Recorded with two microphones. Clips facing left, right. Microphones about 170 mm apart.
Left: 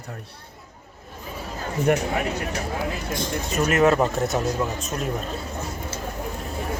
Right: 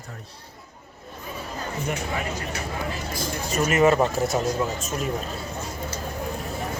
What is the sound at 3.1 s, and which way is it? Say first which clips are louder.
Speech: left 2 dB; 5° right (ahead or behind).